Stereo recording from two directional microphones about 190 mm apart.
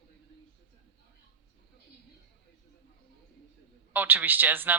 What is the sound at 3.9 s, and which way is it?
Speech, 10° right (ahead or behind).